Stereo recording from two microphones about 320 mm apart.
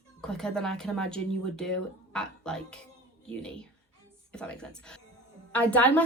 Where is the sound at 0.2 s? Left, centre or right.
Centre.